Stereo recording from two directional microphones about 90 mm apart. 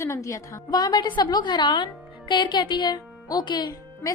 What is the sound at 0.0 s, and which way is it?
A woman's voice, 35° left (ahead or behind).